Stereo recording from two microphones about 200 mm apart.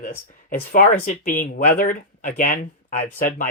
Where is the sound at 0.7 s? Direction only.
40° left (ahead or behind).